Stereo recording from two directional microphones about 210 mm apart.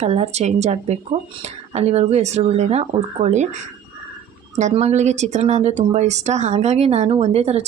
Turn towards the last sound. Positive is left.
turn(degrees=-30)  # may be behind; listen again after turning